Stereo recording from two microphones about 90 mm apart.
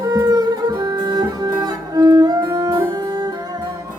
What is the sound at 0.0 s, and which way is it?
Music, 40° right (ahead or behind).